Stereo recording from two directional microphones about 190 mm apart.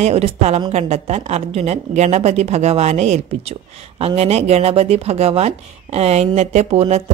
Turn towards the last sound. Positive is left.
turn(degrees=-35)  # may be behind; listen again after turning